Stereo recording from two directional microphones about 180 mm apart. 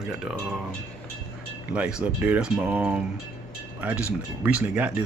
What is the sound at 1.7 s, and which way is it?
Speech, 5° right (ahead or behind).